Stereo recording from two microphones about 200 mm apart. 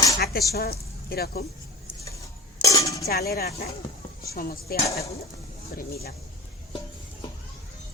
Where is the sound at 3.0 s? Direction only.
50° left (ahead or behind).